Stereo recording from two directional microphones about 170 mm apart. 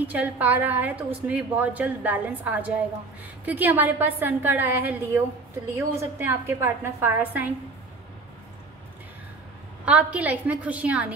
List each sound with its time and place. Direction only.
0.0 s a woman's voice: 10° right (ahead or behind)
9.8 s a woman's voice: 10° right (ahead or behind)